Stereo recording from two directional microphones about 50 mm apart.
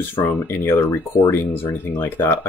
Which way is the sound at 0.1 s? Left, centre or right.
Left.